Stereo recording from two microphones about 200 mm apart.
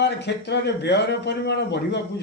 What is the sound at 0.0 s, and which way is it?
A man's voice, 60° left (ahead or behind).